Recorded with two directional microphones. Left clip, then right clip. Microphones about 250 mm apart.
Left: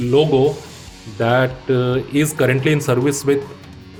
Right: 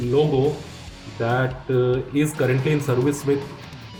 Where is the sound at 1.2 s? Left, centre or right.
Left.